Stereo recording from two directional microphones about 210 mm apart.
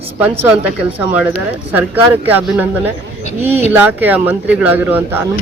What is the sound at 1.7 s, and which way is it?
Speech, 10° right (ahead or behind).